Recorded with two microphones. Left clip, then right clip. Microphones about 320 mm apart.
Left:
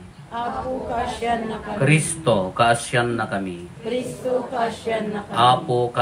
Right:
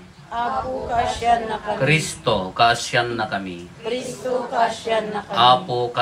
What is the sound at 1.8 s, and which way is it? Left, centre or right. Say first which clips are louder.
Speech: left 1 dB; centre.